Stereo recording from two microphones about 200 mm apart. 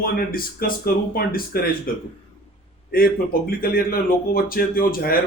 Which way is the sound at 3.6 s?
45° left (ahead or behind).